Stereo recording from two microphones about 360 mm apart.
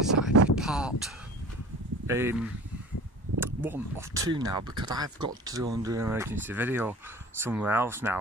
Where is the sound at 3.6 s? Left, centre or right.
Centre.